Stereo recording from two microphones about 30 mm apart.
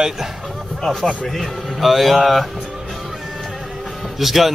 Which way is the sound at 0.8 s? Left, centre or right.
Centre.